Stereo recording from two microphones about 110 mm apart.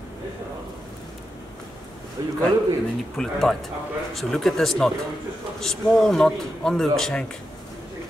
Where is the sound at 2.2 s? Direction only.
40° right (ahead or behind).